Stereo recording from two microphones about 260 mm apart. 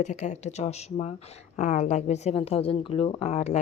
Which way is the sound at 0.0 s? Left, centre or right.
Left.